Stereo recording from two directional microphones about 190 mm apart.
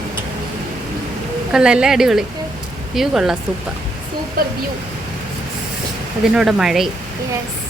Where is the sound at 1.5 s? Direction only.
5° right (ahead or behind).